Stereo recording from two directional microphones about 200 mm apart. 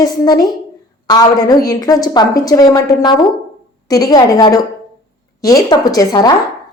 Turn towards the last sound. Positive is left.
turn(degrees=20)  # may be behind; listen again after turning